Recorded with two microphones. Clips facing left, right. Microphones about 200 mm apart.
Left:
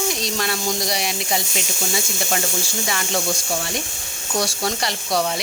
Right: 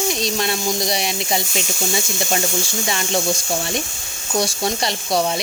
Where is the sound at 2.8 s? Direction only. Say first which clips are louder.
Right 2 dB; 25° right (ahead or behind).